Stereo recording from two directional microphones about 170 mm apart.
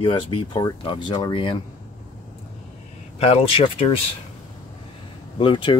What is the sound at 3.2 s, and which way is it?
Speech, 35° left (ahead or behind).